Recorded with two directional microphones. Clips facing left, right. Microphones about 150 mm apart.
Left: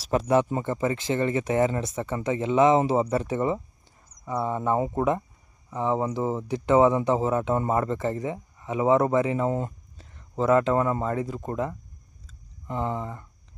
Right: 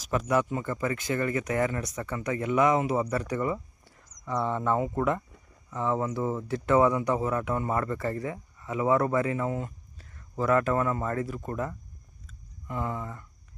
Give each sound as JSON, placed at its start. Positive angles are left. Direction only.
{"t": 0.0, "sound": "speech", "side_deg": 30}
{"t": 4.3, "sound": "speech", "side_deg": 10}
{"t": 9.6, "sound": "a sound", "side_deg": 35}
{"t": 10.2, "sound": "speech", "side_deg": 20}